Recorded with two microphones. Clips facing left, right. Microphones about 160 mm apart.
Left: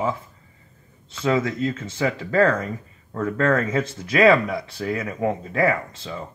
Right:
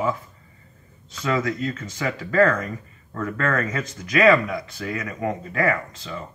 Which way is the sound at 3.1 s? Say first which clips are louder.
Left 4 dB; 30° left (ahead or behind).